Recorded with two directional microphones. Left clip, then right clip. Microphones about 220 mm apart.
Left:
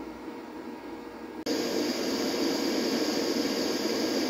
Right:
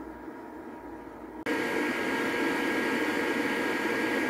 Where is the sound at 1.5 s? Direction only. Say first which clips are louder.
Right 1 dB; 35° right (ahead or behind).